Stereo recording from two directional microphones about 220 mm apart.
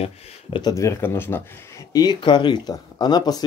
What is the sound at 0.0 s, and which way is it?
Speech, 20° left (ahead or behind).